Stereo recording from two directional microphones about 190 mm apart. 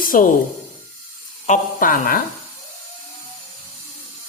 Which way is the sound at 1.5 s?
45° left (ahead or behind).